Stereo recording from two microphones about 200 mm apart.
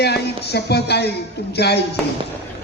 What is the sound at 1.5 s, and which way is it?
Speech, 55° left (ahead or behind).